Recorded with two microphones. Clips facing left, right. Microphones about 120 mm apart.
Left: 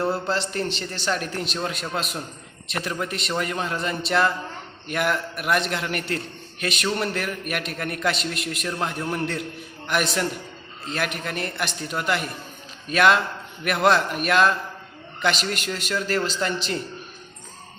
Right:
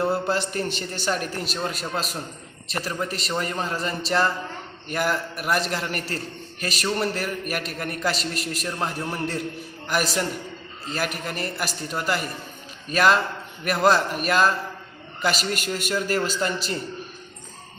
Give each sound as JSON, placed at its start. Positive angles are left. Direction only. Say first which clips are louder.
{"t": 0.0, "sound": "a man's voice", "louder": "right 1 dB", "side_deg": -10}
{"t": 0.7, "sound": "a woman's voice", "louder": "even", "side_deg": -50}
{"t": 1.0, "sound": "a man's voice", "louder": "even", "side_deg": -5}